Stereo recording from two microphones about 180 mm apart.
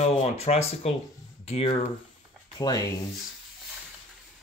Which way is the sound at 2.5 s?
20° left (ahead or behind).